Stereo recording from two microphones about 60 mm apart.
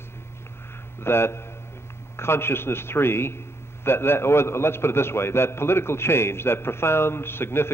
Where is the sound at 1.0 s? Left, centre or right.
Left.